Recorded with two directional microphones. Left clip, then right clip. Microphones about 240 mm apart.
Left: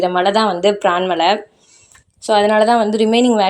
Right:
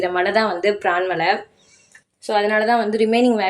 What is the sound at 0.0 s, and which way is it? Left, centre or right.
A woman's voice, left.